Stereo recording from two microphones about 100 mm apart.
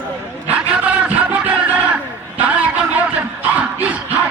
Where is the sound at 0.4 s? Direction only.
15° right (ahead or behind).